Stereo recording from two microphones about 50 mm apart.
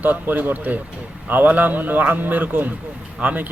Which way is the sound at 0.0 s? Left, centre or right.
Right.